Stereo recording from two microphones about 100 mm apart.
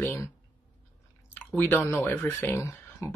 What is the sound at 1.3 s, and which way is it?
Speech, 20° left (ahead or behind).